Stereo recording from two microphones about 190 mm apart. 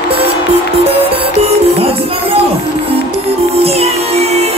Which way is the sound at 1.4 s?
30° right (ahead or behind).